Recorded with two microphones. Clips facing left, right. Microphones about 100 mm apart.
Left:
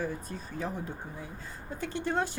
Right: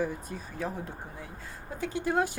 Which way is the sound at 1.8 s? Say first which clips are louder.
Right 3 dB; 5° right (ahead or behind).